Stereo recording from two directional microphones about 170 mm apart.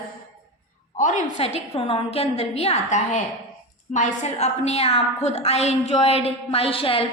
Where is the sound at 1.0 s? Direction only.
45° left (ahead or behind).